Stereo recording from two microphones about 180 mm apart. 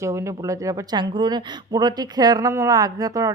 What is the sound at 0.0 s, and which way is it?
Speech, 15° right (ahead or behind).